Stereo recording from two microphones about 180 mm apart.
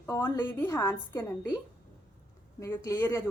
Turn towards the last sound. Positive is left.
turn(degrees=15)  # may be behind; listen again after turning